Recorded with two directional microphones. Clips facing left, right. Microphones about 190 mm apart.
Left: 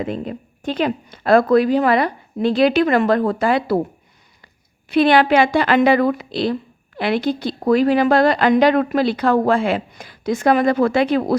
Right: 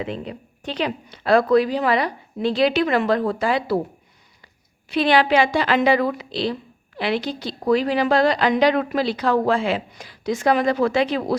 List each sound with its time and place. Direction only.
0.0 s a woman's voice: 45° left (ahead or behind)
4.9 s a woman's voice: 55° left (ahead or behind)